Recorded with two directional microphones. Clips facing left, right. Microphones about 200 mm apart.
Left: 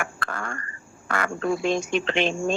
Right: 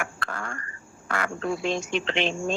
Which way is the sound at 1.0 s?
55° left (ahead or behind).